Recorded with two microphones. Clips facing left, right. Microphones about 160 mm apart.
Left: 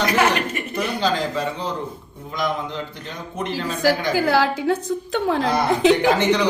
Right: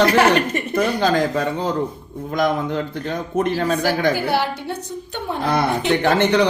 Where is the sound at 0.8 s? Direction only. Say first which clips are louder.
Right 4 dB; 50° right (ahead or behind).